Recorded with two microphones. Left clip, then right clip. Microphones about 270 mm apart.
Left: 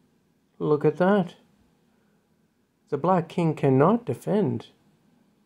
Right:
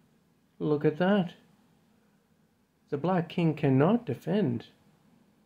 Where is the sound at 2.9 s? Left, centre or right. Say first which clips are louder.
Left 6 dB; left.